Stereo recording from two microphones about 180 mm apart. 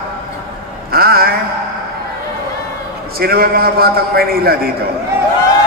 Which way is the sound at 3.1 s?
55° right (ahead or behind).